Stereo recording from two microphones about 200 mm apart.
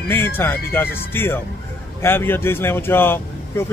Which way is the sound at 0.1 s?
10° left (ahead or behind).